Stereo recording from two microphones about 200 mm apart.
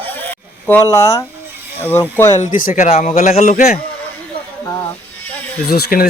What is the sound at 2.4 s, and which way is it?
A man's voice, 45° left (ahead or behind).